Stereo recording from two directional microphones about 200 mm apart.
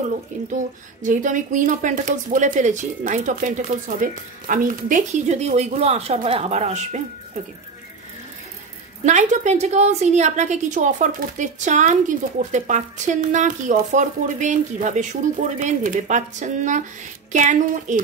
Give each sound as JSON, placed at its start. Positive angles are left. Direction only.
{"t": 1.0, "sound": "a woman's voice", "side_deg": -40}
{"t": 9.0, "sound": "a woman's voice", "side_deg": -35}